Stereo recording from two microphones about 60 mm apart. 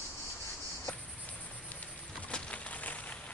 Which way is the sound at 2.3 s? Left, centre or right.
Left.